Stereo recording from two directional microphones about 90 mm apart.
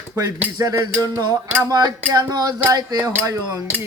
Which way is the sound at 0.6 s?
40° right (ahead or behind).